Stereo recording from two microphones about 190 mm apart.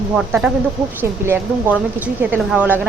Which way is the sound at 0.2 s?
5° right (ahead or behind).